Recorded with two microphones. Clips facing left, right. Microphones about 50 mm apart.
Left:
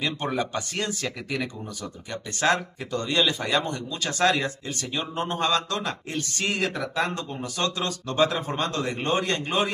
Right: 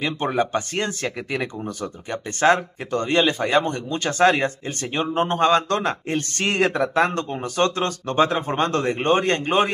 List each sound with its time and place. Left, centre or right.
0.0 s speech: right